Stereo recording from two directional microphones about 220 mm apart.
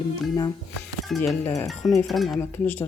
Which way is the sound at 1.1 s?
5° left (ahead or behind).